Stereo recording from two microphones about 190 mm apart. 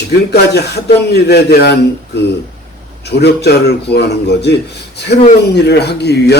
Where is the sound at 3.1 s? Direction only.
60° left (ahead or behind).